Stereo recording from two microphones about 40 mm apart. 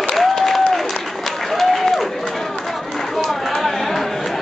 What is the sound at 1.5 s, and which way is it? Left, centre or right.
Applause, centre.